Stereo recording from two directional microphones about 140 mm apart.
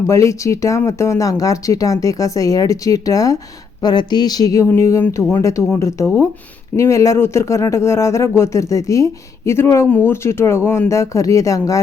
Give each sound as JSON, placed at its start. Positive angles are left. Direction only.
{"t": 0.1, "sound": "speech", "side_deg": 20}